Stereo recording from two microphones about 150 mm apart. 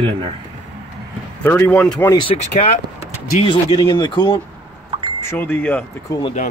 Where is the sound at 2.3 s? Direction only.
50° left (ahead or behind).